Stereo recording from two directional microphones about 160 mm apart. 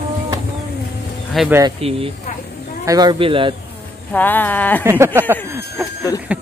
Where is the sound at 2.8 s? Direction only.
25° right (ahead or behind).